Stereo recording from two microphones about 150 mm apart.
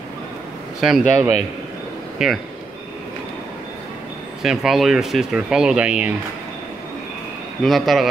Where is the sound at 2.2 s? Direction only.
5° right (ahead or behind).